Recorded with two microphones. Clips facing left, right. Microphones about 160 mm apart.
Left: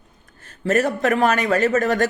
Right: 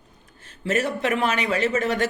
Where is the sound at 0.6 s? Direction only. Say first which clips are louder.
Left 5 dB; 40° left (ahead or behind).